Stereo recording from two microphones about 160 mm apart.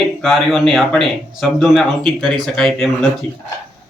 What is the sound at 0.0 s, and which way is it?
Speech, centre (ahead or behind).